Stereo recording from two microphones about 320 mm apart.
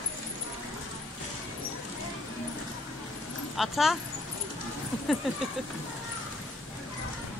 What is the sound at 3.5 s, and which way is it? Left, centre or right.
Speech, centre.